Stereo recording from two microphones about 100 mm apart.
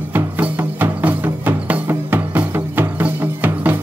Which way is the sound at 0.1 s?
20° right (ahead or behind).